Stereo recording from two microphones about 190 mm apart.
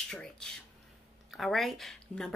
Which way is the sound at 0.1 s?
5° left (ahead or behind).